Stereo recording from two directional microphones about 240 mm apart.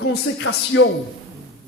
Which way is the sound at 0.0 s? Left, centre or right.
Left.